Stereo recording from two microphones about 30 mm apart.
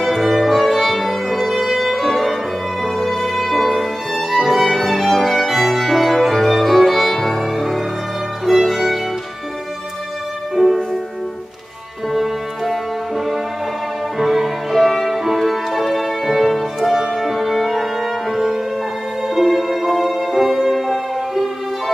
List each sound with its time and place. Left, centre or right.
0.0 s music: centre
1.5 s violin: centre
3.3 s music: centre
10.5 s music: centre
12.1 s music: centre
14.1 s music: centre
17.1 s music: centre